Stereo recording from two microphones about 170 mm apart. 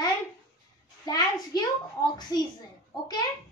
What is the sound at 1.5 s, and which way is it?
Speech, 25° left (ahead or behind).